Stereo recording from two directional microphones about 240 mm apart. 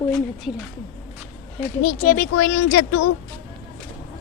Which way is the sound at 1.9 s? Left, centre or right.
Left.